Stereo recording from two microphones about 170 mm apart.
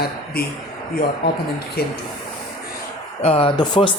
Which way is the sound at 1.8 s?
65° left (ahead or behind).